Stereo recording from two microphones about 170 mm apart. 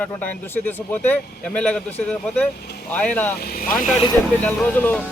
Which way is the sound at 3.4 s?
60° left (ahead or behind).